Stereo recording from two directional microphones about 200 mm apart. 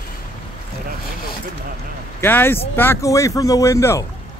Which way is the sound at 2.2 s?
10° left (ahead or behind).